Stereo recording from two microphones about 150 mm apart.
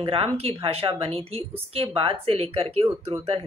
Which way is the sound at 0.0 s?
40° right (ahead or behind).